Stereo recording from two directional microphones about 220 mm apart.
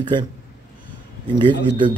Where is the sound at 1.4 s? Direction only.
20° right (ahead or behind).